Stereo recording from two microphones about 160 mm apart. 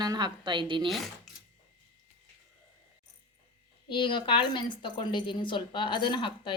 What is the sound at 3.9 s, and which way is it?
A woman's voice, 30° left (ahead or behind).